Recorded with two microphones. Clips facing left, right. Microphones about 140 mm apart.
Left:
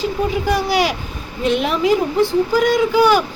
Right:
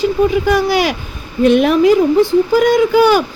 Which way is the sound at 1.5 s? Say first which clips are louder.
Right 6 dB; 55° right (ahead or behind).